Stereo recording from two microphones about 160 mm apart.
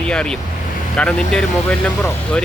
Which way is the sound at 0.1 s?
5° left (ahead or behind).